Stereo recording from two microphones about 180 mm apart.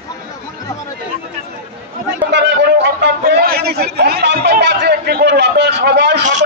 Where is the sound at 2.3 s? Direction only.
75° right (ahead or behind).